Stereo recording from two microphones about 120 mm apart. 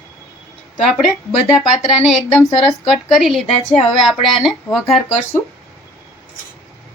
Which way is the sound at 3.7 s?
60° left (ahead or behind).